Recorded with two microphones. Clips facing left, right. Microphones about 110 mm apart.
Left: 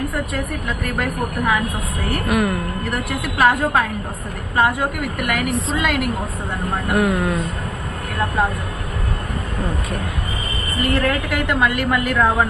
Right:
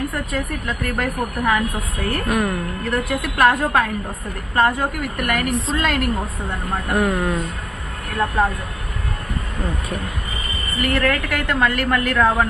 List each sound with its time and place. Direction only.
0.9 s a woman's voice: 5° left (ahead or behind)
8.4 s a woman's voice: centre (ahead or behind)
10.8 s a woman's voice: 15° left (ahead or behind)